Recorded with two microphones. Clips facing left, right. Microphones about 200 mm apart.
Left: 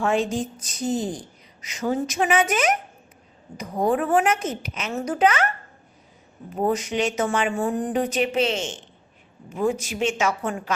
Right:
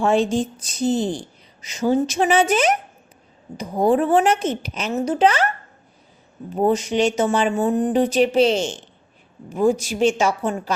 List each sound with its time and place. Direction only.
0.0 s a woman's voice: 30° right (ahead or behind)
6.6 s a woman's voice: 30° right (ahead or behind)